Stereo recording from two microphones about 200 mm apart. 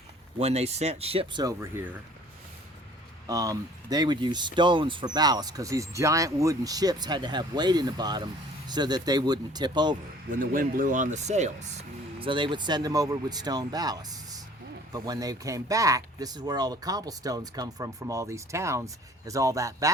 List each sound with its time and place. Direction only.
0.3 s speech: 30° right (ahead or behind); by 2.0 s 10° right (ahead or behind)
3.2 s speech: 15° right (ahead or behind)
10.3 s speech: 45° right (ahead or behind); by 19.9 s 15° right (ahead or behind)